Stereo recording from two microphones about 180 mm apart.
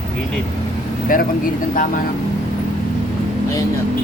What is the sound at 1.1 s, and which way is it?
Speech, 50° left (ahead or behind).